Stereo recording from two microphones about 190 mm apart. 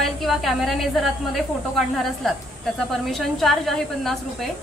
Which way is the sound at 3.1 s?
Centre (ahead or behind).